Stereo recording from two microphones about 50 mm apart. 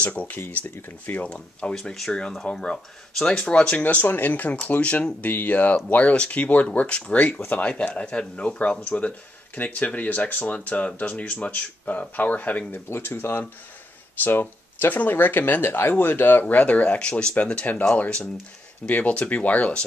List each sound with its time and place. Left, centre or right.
0.0 s speech: left; by 3.7 s centre
3.7 s speech: left
12.7 s speech: left
17.1 s speech: centre
17.4 s speech: left